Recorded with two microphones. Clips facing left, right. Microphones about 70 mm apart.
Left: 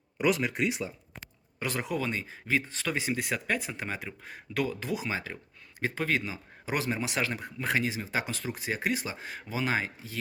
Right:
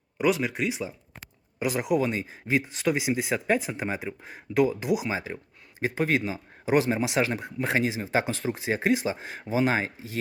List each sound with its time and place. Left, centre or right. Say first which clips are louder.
0.2 s speech: right 2 dB; centre
1.5 s speech: right 7 dB; centre